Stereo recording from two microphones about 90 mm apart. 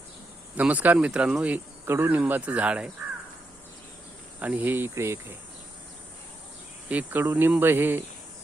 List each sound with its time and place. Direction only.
0.5 s speech: 15° right (ahead or behind)
1.8 s speech: 25° right (ahead or behind)
4.4 s speech: 20° right (ahead or behind)
6.8 s speech: 20° right (ahead or behind)